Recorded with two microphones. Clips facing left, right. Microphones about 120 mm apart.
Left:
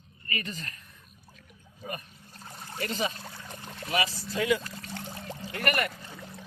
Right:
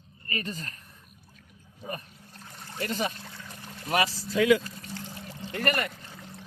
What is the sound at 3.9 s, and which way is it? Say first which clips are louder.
Speech: right 3 dB; 70° right (ahead or behind).